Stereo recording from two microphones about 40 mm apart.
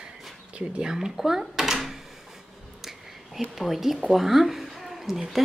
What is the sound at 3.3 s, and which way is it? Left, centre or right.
A woman's voice, centre.